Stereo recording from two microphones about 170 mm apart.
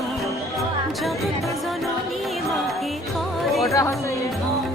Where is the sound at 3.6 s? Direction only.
20° left (ahead or behind).